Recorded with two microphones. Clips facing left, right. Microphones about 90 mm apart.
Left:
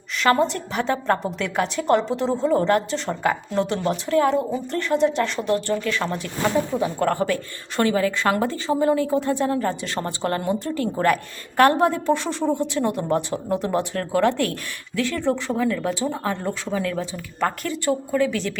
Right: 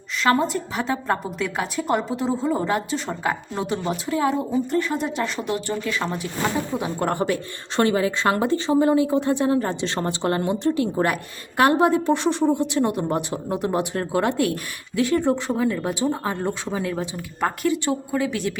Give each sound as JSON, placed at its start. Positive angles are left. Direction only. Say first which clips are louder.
{"t": 0.2, "sound": "a woman's voice", "louder": "left 1 dB", "side_deg": 0}